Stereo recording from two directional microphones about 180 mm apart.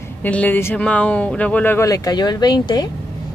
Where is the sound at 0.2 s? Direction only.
10° left (ahead or behind).